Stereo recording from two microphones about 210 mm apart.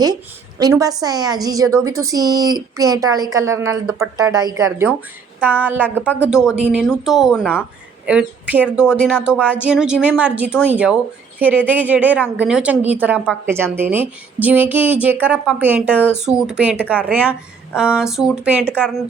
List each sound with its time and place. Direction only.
0.6 s a woman's voice: 15° right (ahead or behind)
6.1 s speech: 10° left (ahead or behind)
6.3 s a woman's voice: 5° right (ahead or behind)